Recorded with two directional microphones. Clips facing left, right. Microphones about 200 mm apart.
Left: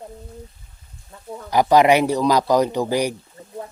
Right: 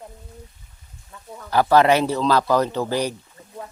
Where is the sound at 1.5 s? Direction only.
15° left (ahead or behind).